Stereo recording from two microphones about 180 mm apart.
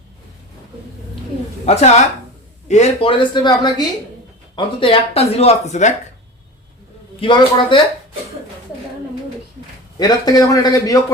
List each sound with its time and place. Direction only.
1.6 s a woman's voice: 40° left (ahead or behind)
7.2 s speech: 30° left (ahead or behind)
10.0 s speech: 20° left (ahead or behind)